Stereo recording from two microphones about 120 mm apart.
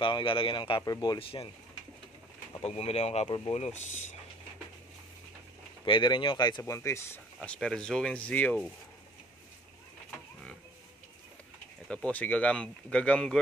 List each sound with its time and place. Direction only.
0.0 s a man's voice: 45° left (ahead or behind)
2.6 s speech: 60° left (ahead or behind)
5.9 s speech: 40° left (ahead or behind)
6.6 s speech: 25° left (ahead or behind)
7.3 s speech: 5° left (ahead or behind)
11.9 s speech: 10° left (ahead or behind)